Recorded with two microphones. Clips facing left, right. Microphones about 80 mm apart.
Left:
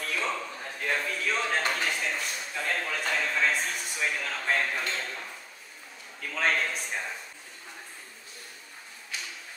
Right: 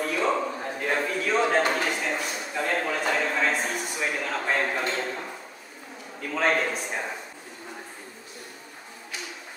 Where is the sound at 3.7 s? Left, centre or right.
Right.